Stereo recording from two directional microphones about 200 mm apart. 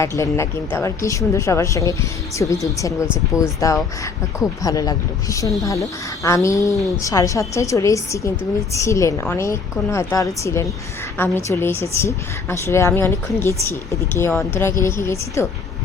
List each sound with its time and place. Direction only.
0.0 s a woman's voice: 15° left (ahead or behind)